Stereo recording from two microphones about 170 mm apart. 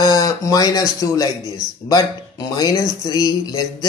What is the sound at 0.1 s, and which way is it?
A man's voice, 20° left (ahead or behind).